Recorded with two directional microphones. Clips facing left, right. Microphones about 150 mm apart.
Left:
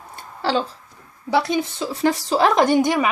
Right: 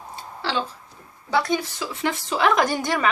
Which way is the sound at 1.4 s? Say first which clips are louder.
Left 2 dB; 35° left (ahead or behind).